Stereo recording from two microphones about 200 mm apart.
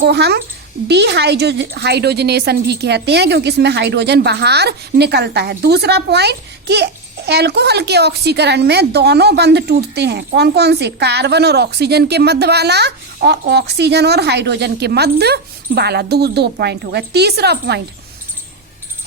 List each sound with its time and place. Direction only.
0.0 s a woman's voice: 55° right (ahead or behind)